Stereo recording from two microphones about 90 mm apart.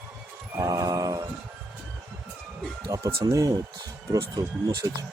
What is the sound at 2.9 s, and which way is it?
Speech, 40° right (ahead or behind).